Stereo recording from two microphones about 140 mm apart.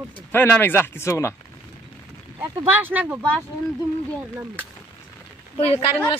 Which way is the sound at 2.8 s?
10° right (ahead or behind).